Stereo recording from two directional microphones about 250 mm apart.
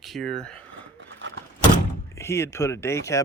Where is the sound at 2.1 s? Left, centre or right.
Centre.